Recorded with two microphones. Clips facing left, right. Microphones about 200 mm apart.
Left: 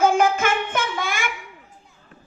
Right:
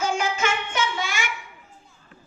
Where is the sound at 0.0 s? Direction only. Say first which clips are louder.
Left 7 dB; 55° left (ahead or behind).